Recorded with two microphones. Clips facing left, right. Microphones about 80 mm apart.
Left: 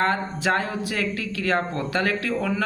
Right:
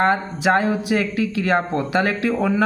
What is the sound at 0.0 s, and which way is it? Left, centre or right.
Speech, centre.